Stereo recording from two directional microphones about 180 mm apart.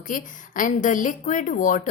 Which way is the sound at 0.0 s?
45° left (ahead or behind).